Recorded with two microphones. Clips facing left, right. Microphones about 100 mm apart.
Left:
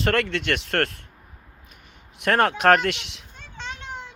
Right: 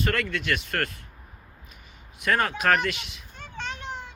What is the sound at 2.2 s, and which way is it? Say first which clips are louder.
Speech: left 5 dB; 65° left (ahead or behind).